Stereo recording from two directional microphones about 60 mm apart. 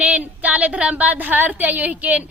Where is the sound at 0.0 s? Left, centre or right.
Right.